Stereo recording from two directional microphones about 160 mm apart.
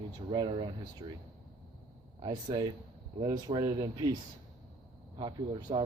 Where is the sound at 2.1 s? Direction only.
30° right (ahead or behind).